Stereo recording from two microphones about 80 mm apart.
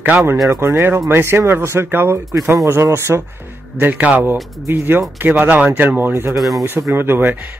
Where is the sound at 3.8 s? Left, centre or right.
Centre.